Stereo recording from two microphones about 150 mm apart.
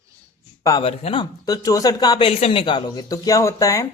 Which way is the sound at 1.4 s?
25° left (ahead or behind).